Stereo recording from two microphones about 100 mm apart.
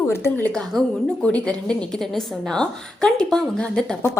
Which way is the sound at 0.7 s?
Centre (ahead or behind).